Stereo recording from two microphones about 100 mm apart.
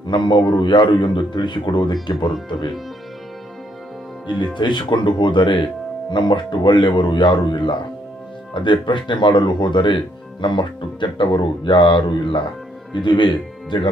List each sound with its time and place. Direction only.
0.0 s speech: 50° left (ahead or behind)
4.6 s speech: 50° left (ahead or behind)